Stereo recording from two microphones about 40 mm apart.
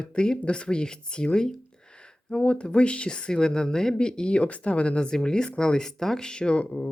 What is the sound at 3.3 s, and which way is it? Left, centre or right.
Speech, centre.